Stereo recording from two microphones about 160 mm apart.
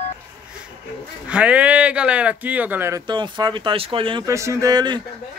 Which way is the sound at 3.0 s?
30° right (ahead or behind).